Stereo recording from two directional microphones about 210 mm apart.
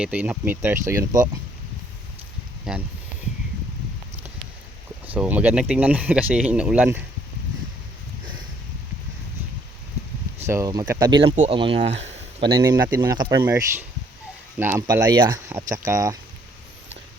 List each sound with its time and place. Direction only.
0.0 s speech: 5° right (ahead or behind)
2.7 s speech: 5° right (ahead or behind)
5.0 s speech: 5° right (ahead or behind)
10.4 s speech: 15° right (ahead or behind)
11.3 s speech: 25° right (ahead or behind)
12.5 s speech: 20° right (ahead or behind)